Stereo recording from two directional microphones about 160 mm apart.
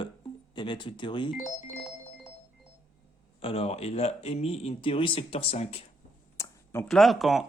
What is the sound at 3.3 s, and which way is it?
Speech, 35° left (ahead or behind).